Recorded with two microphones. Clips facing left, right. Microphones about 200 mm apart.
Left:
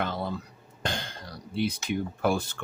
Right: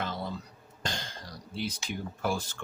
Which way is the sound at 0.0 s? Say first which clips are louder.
Left 4 dB; 55° left (ahead or behind).